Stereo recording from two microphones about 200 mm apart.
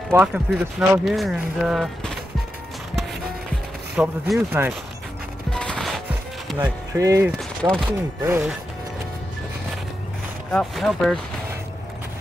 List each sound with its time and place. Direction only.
0.1 s speech: 5° right (ahead or behind)
4.0 s speech: 10° right (ahead or behind)
5.5 s chopping: 5° left (ahead or behind)
6.6 s speech: 15° right (ahead or behind)
10.5 s speech: centre (ahead or behind)